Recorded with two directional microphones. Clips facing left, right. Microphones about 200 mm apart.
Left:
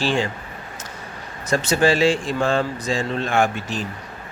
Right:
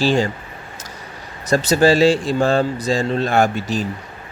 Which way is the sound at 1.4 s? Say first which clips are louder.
Right 4 dB; 35° right (ahead or behind).